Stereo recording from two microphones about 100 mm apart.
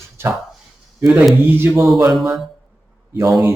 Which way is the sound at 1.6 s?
25° right (ahead or behind).